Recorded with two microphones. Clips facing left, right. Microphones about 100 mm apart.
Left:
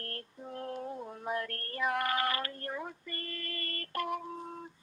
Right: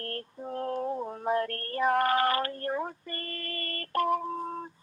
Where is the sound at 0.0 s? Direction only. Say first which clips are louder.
Right 7 dB; 40° right (ahead or behind).